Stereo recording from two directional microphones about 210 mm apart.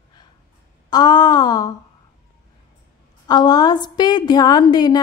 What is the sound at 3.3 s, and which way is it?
A woman's voice, 20° left (ahead or behind).